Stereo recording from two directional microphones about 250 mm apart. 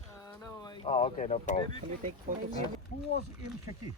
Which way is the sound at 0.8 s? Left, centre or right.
Left.